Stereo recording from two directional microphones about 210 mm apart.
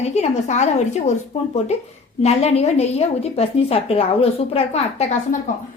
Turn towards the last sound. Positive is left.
turn(degrees=30)  # may be behind; listen again after turning